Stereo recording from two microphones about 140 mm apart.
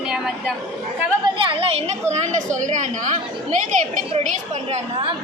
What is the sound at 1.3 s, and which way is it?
A woman's voice, 40° right (ahead or behind).